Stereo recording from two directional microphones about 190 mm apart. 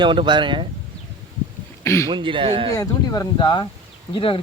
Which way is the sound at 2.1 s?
25° right (ahead or behind).